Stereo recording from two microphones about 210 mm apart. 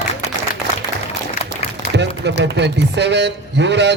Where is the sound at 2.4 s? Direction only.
55° right (ahead or behind).